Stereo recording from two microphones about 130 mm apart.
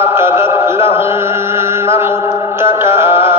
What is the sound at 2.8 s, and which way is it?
Music, 20° right (ahead or behind).